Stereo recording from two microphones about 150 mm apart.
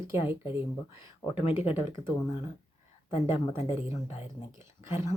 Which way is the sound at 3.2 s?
15° right (ahead or behind).